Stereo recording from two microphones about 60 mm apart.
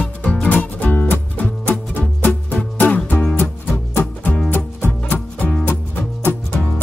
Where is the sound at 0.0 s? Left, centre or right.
Left.